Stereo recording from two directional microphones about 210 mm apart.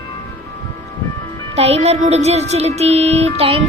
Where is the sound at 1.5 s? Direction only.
30° right (ahead or behind).